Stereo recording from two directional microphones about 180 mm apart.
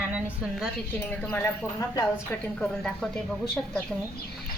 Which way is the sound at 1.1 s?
5° left (ahead or behind).